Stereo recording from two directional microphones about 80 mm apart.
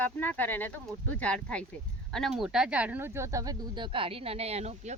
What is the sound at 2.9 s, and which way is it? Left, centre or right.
Speech, right.